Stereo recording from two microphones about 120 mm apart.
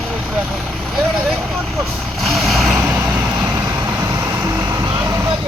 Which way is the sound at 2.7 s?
15° right (ahead or behind).